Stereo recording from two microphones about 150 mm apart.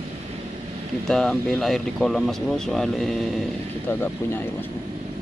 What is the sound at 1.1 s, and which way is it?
Speech, centre (ahead or behind).